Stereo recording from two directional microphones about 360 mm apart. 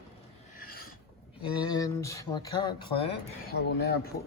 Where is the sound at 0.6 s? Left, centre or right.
Left.